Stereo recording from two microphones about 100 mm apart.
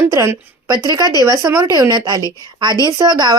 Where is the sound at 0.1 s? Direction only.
30° right (ahead or behind).